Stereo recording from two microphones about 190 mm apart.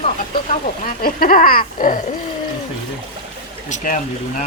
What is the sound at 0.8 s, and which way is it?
Speech, 50° left (ahead or behind).